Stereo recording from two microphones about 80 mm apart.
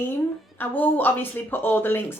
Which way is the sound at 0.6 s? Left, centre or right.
Left.